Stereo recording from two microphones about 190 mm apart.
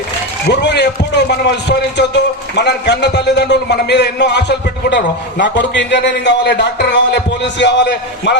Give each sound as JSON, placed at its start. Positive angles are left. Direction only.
{"t": 0.4, "sound": "a man's voice", "side_deg": 65}